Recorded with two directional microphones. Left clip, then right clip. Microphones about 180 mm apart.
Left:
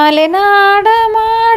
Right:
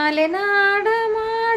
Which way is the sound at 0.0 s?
45° left (ahead or behind).